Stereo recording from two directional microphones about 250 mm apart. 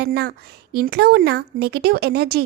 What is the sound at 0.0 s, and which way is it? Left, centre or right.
A woman's voice, right.